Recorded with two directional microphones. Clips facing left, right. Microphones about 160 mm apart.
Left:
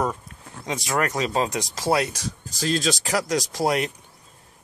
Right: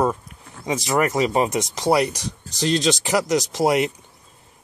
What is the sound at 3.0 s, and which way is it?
Speech, 25° right (ahead or behind).